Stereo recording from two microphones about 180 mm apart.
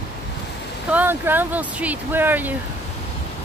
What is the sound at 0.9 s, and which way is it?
Speech, 10° right (ahead or behind).